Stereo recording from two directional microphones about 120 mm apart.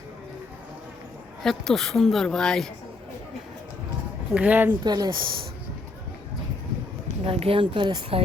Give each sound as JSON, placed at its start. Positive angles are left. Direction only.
{"t": 1.4, "sound": "a woman's voice", "side_deg": 0}
{"t": 4.4, "sound": "a woman's voice", "side_deg": -15}
{"t": 4.8, "sound": "speech", "side_deg": -35}
{"t": 7.3, "sound": "speech", "side_deg": -50}